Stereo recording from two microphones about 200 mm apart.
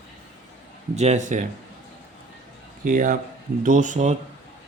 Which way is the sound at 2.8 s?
40° right (ahead or behind).